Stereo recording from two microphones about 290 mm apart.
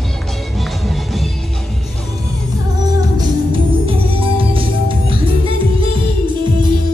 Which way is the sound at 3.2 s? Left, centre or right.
Centre.